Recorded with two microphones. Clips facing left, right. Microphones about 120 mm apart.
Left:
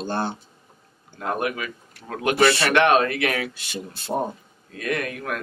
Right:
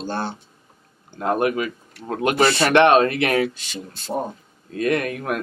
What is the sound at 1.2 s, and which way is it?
Speech, 35° right (ahead or behind).